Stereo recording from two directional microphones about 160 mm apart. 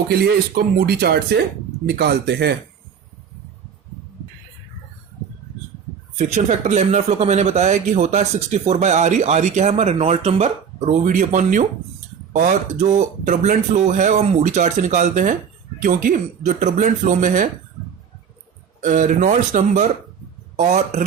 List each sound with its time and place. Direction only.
0.1 s speech: 85° right
6.1 s speech: 45° right (ahead or behind)
18.8 s speech: 55° right (ahead or behind)